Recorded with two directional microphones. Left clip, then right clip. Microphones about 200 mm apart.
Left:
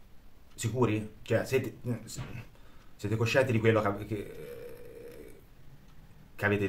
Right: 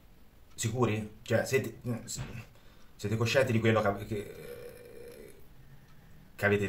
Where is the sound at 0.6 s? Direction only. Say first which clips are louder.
Left 1 dB; 15° left (ahead or behind).